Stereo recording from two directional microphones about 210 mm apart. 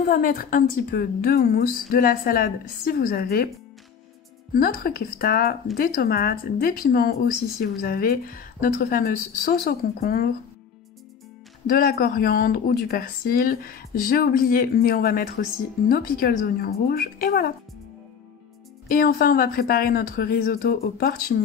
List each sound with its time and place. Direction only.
0.1 s speech: 40° left (ahead or behind)
4.6 s speech: 45° left (ahead or behind)
11.7 s speech: 45° left (ahead or behind)
18.9 s speech: 45° left (ahead or behind)